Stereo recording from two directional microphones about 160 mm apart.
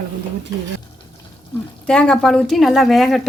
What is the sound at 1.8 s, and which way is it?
A woman's voice, 5° left (ahead or behind).